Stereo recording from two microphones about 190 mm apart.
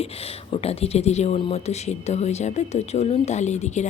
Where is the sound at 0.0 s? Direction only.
30° left (ahead or behind).